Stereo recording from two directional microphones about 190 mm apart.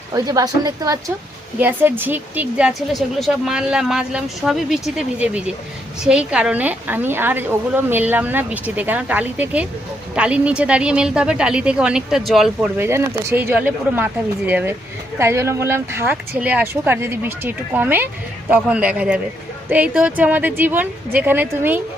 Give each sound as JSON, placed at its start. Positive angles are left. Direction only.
{"t": 0.1, "sound": "a woman's voice", "side_deg": -20}